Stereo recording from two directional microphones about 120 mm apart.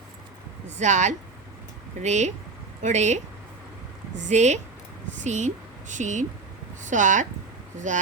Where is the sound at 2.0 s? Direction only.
75° right (ahead or behind).